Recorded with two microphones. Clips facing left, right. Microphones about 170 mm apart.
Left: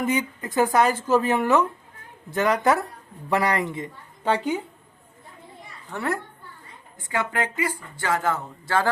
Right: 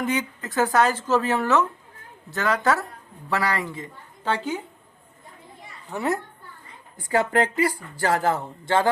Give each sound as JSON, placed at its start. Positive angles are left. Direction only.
{"t": 0.0, "sound": "speech", "side_deg": 10}
{"t": 5.9, "sound": "a child's voice", "side_deg": -15}
{"t": 7.0, "sound": "speech", "side_deg": -40}